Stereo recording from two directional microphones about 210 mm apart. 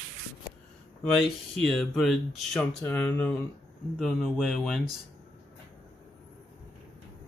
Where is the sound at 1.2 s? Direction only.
Centre (ahead or behind).